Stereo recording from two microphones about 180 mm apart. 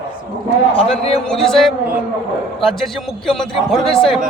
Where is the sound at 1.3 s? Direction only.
5° left (ahead or behind).